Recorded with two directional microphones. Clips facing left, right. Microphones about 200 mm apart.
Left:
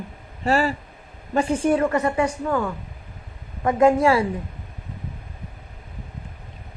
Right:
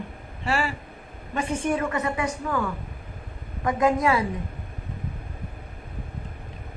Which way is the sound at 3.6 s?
30° left (ahead or behind).